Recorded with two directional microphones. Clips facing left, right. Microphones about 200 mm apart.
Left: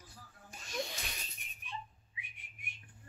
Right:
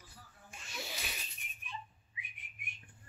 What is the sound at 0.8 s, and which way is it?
Mouse, 5° right (ahead or behind).